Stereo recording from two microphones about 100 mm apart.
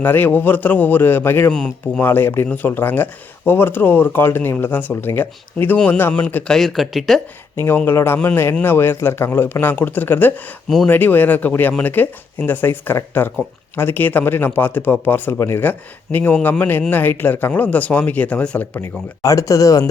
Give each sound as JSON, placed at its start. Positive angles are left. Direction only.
{"t": 0.0, "sound": "speech", "side_deg": 20}
{"t": 1.5, "sound": "speech", "side_deg": 10}
{"t": 2.0, "sound": "speech", "side_deg": 20}
{"t": 7.5, "sound": "speech", "side_deg": 25}
{"t": 18.8, "sound": "speech", "side_deg": 35}